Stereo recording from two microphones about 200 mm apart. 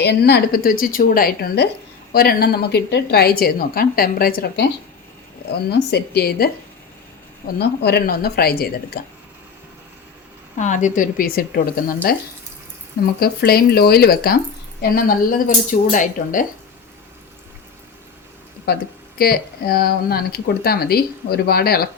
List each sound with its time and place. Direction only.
0.0 s speech: 55° left (ahead or behind)
5.9 s speech: 50° left (ahead or behind)
7.6 s speech: 55° left (ahead or behind)
10.6 s a woman's voice: 40° left (ahead or behind)
18.7 s speech: 55° left (ahead or behind)